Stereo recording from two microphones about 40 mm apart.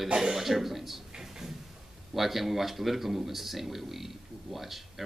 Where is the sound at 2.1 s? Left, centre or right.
Centre.